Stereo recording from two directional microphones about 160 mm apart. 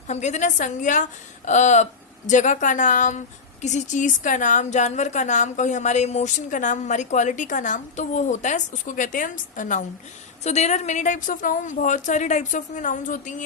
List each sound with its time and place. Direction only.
0.1 s speech: 45° left (ahead or behind)